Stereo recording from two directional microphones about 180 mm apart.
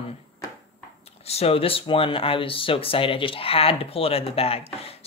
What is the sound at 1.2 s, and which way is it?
Speech, 35° left (ahead or behind).